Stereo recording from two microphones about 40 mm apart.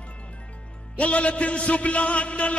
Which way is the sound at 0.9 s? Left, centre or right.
Left.